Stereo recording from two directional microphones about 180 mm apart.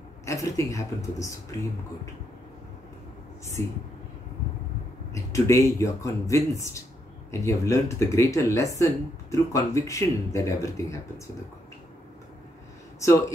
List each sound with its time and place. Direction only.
0.2 s speech: 15° left (ahead or behind)
3.6 s speech: 15° left (ahead or behind)
5.1 s speech: 15° left (ahead or behind)